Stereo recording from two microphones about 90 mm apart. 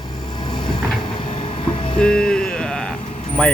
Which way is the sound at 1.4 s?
70° left (ahead or behind).